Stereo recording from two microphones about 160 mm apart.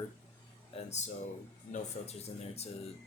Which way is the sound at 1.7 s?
40° left (ahead or behind).